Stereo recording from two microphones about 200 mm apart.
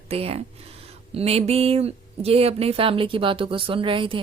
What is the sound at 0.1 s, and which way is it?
Speech, 30° right (ahead or behind).